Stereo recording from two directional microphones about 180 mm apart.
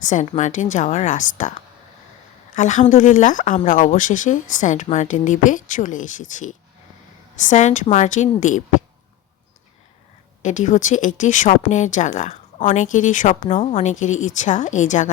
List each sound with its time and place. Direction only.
0.0 s speech: 40° left (ahead or behind)
2.6 s speech: 40° left (ahead or behind)
10.4 s speech: 40° left (ahead or behind)